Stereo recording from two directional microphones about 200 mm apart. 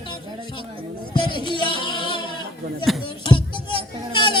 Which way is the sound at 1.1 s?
25° left (ahead or behind).